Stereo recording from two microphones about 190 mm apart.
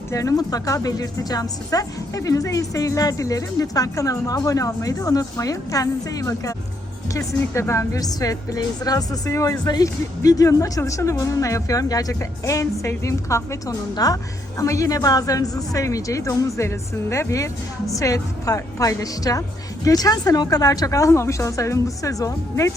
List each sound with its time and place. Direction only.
0.1 s a woman's voice: 15° left (ahead or behind)